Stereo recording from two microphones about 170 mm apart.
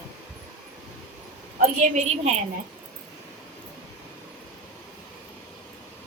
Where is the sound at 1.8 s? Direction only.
45° right (ahead or behind).